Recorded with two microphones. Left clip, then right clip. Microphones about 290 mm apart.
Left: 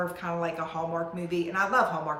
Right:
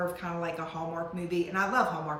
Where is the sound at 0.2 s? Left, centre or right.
Centre.